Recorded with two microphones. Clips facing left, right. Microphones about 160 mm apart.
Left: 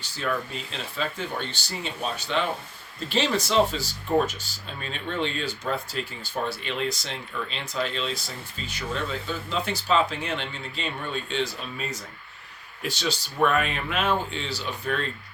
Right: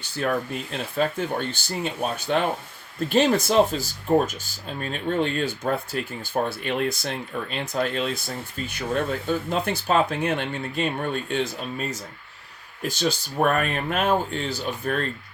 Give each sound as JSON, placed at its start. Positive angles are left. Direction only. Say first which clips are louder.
{"t": 0.0, "sound": "speech", "louder": "right 4 dB", "side_deg": -55}